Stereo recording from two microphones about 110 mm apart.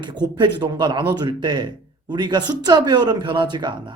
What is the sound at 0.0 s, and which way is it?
Speech, 40° right (ahead or behind).